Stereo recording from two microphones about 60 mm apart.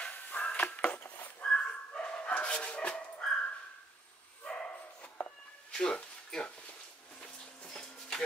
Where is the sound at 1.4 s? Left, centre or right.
Centre.